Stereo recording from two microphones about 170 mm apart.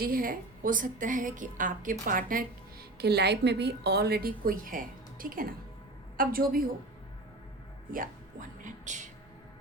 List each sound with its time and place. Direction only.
0.0 s a woman's voice: 55° right (ahead or behind)
7.9 s music: 50° right (ahead or behind)